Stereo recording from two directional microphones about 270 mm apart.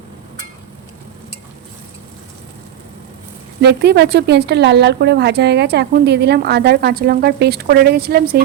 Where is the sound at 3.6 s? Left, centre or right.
Right.